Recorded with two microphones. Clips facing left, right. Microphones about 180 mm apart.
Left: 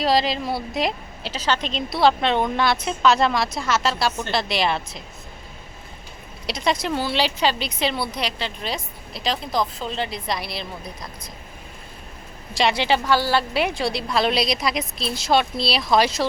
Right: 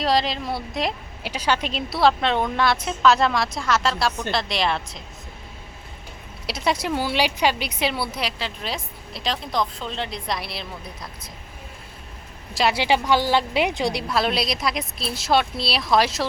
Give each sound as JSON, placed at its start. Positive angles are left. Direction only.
{"t": 0.0, "sound": "a woman's voice", "side_deg": 0}
{"t": 1.2, "sound": "a woman's voice", "side_deg": -10}
{"t": 6.4, "sound": "a woman's voice", "side_deg": -5}
{"t": 12.5, "sound": "a woman's voice", "side_deg": -5}
{"t": 14.1, "sound": "a woman's voice", "side_deg": 0}